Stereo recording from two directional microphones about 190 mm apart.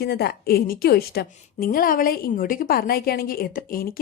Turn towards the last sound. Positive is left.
turn(degrees=50)  # may be behind; listen again after turning